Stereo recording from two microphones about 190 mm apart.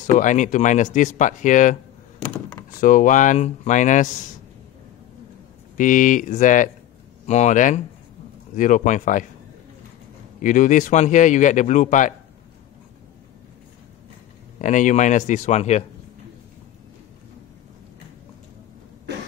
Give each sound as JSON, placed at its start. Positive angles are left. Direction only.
{"t": 0.0, "sound": "speech", "side_deg": 40}
{"t": 2.8, "sound": "speech", "side_deg": 45}
{"t": 5.8, "sound": "speech", "side_deg": 40}
{"t": 10.4, "sound": "speech", "side_deg": 40}
{"t": 14.6, "sound": "speech", "side_deg": 40}
{"t": 19.1, "sound": "cough", "side_deg": -60}